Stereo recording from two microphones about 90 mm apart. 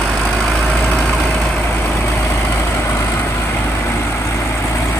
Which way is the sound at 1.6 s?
20° left (ahead or behind).